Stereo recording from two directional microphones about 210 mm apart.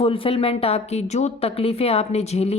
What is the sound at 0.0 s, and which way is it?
A woman's voice, 25° left (ahead or behind).